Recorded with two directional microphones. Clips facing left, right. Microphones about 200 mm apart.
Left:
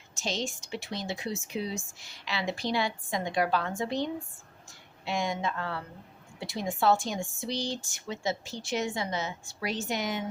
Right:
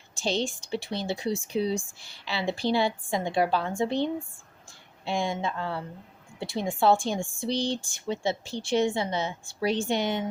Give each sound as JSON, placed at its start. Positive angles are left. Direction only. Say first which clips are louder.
{"t": 0.1, "sound": "a woman's voice", "louder": "right 5 dB", "side_deg": -30}